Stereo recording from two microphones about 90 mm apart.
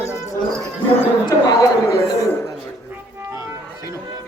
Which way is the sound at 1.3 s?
45° left (ahead or behind).